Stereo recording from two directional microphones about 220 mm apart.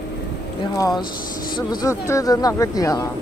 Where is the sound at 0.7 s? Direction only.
15° left (ahead or behind).